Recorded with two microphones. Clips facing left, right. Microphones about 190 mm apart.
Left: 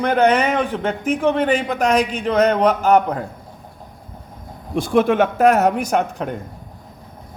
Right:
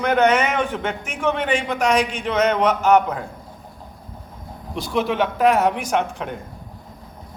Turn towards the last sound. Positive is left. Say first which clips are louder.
# left 3 dB
turn(degrees=40)  # may be behind; listen again after turning